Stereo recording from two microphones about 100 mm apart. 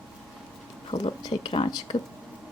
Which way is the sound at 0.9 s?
90° left.